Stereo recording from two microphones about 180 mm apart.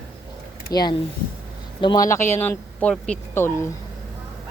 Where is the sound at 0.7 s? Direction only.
20° left (ahead or behind).